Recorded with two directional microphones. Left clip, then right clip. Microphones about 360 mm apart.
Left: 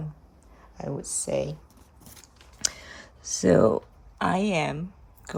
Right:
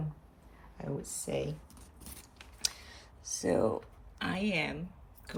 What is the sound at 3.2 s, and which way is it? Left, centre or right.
Speech, left.